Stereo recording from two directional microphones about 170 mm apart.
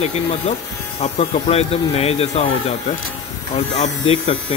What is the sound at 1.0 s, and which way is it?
Speech, 35° left (ahead or behind).